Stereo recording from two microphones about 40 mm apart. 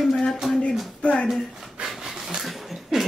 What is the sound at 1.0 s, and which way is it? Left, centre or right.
Speech, left.